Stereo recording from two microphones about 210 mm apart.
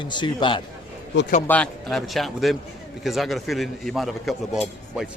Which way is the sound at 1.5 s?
5° left (ahead or behind).